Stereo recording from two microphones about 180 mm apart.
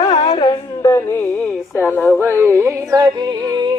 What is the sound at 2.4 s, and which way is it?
Music, 15° right (ahead or behind).